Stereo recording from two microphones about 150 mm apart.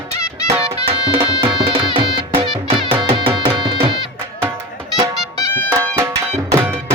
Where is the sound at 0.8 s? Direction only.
35° right (ahead or behind).